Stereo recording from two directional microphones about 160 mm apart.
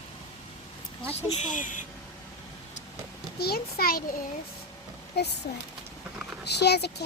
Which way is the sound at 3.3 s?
80° left.